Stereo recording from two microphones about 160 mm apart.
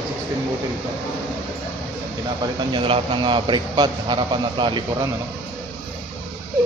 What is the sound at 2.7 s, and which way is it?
A man's voice, 35° right (ahead or behind).